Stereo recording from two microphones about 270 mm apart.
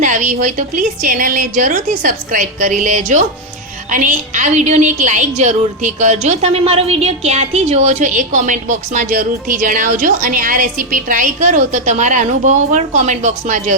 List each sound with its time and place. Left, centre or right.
0.0 s a woman's voice: right